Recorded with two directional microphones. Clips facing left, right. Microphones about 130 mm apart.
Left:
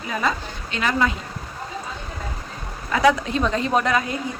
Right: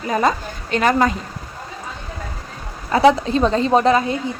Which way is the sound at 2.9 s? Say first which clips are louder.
Right 5 dB; 30° right (ahead or behind).